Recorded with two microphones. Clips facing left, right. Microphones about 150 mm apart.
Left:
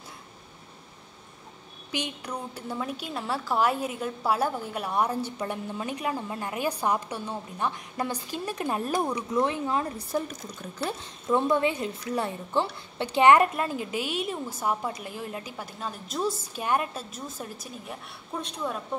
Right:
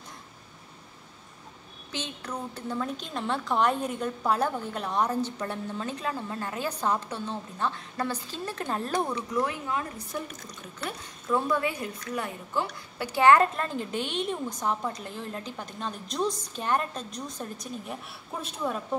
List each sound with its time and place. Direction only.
1.9 s a woman's voice: 15° left (ahead or behind)
9.4 s a woman's voice: 30° left (ahead or behind); by 18.8 s 5° right (ahead or behind)